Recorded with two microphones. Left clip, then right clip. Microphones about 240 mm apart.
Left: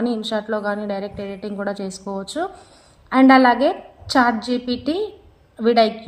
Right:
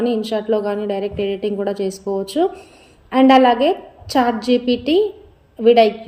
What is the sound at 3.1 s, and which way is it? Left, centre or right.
A woman's voice, left.